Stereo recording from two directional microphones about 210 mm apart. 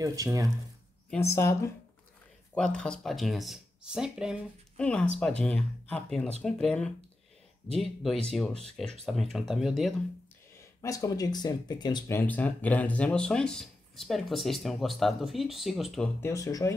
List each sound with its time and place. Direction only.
0.0 s speech: 15° right (ahead or behind)
1.1 s speech: 15° left (ahead or behind)
10.6 s speech: 15° left (ahead or behind)
16.2 s speech: 15° left (ahead or behind)